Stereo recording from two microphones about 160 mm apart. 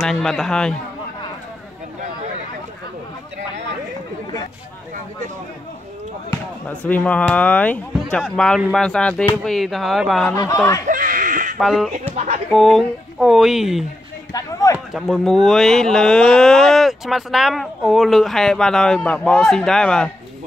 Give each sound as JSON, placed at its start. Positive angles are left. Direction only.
{"t": 0.0, "sound": "speech", "side_deg": 0}
{"t": 6.7, "sound": "speech", "side_deg": 10}
{"t": 10.3, "sound": "speech", "side_deg": 20}
{"t": 10.9, "sound": "a sound", "side_deg": -55}
{"t": 11.5, "sound": "speech", "side_deg": 0}
{"t": 14.3, "sound": "speech", "side_deg": 20}
{"t": 14.9, "sound": "speech", "side_deg": 0}